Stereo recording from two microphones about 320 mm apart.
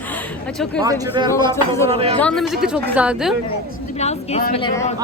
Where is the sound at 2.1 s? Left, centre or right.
Centre.